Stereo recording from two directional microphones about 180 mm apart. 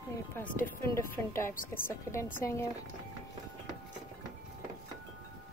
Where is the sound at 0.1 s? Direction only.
15° left (ahead or behind).